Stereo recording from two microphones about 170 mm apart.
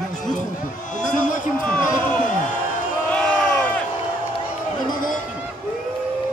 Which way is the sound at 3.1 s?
5° left (ahead or behind).